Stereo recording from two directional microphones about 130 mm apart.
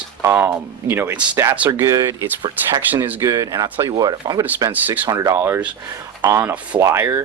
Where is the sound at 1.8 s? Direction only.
25° right (ahead or behind).